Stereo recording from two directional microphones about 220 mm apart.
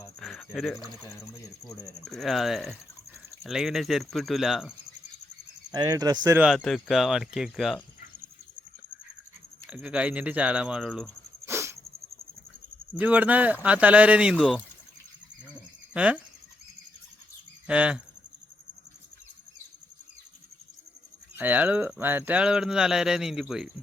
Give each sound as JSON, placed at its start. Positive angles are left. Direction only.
{"t": 0.2, "sound": "cricket", "side_deg": 0}
{"t": 1.0, "sound": "speech", "side_deg": 15}
{"t": 2.0, "sound": "speech", "side_deg": 0}
{"t": 5.7, "sound": "speech", "side_deg": -15}
{"t": 6.6, "sound": "speech", "side_deg": 0}
{"t": 9.6, "sound": "speech", "side_deg": -5}
{"t": 11.4, "sound": "a sound", "side_deg": -10}
{"t": 12.9, "sound": "speech", "side_deg": -10}
{"t": 15.9, "sound": "speech", "side_deg": -5}
{"t": 17.7, "sound": "speech", "side_deg": -5}
{"t": 21.3, "sound": "speech", "side_deg": -10}